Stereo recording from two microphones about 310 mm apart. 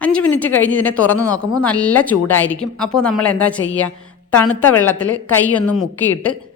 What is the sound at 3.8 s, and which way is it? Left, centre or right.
Speech, left.